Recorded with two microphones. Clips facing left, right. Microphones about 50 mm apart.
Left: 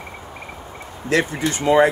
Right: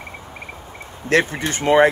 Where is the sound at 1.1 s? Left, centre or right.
Right.